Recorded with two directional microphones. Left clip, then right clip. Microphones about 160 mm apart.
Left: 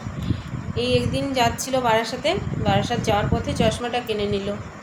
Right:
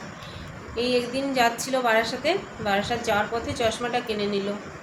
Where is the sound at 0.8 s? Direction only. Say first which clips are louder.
Left 2 dB; 30° left (ahead or behind).